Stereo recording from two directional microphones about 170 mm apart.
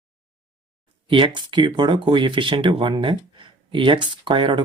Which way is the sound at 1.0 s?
30° right (ahead or behind).